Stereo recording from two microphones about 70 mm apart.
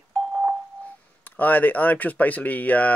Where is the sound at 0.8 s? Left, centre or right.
Left.